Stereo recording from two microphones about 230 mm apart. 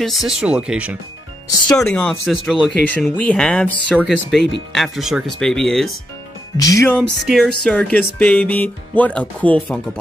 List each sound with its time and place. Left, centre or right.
0.0 s speech: centre
1.7 s speech: centre
6.5 s music: centre
7.0 s music: centre